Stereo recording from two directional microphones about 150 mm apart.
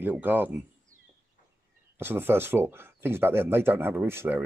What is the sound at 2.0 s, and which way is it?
Speech, 15° right (ahead or behind).